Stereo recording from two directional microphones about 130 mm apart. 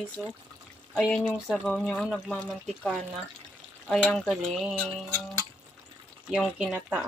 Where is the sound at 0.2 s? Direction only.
Centre (ahead or behind).